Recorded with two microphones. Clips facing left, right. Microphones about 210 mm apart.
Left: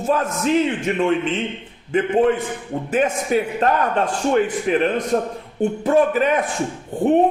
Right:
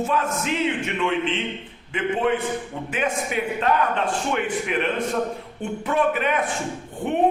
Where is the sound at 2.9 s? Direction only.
40° left (ahead or behind).